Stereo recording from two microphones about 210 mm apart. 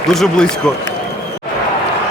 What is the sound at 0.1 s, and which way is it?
Speech, centre (ahead or behind).